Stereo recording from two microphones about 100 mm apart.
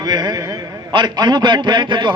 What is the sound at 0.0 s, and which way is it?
A man's voice, 45° right (ahead or behind).